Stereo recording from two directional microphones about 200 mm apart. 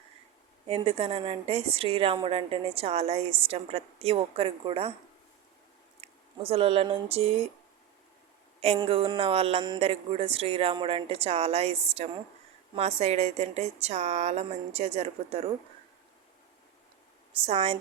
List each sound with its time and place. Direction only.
0.7 s a woman's voice: 30° right (ahead or behind)
6.0 s speech: 30° right (ahead or behind)
8.6 s a woman's voice: 30° right (ahead or behind)
17.4 s speech: 30° right (ahead or behind)